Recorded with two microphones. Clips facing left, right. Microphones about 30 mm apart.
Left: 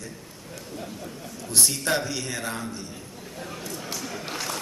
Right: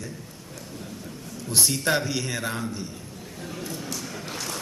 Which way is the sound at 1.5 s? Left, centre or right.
Centre.